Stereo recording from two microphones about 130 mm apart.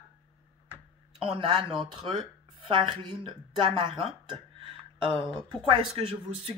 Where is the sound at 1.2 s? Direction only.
45° right (ahead or behind).